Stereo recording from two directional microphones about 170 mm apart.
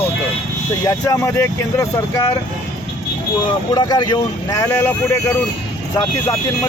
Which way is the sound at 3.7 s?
25° left (ahead or behind).